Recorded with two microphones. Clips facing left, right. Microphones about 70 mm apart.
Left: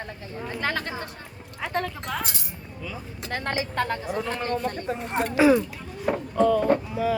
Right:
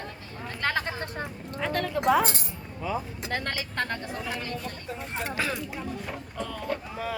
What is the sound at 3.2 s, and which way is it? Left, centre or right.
Speech, centre.